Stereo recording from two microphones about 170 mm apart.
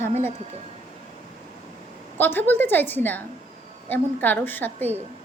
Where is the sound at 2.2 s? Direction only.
10° left (ahead or behind).